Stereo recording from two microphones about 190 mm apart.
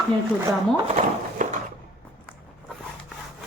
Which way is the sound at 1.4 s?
40° right (ahead or behind).